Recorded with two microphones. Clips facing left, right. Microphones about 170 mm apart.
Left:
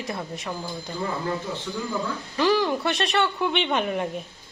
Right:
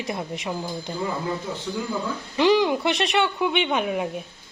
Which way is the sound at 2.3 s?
15° right (ahead or behind).